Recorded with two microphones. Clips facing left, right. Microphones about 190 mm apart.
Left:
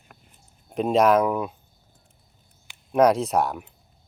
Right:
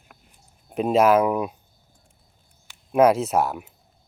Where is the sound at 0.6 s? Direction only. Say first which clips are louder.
Right 1 dB; 5° right (ahead or behind).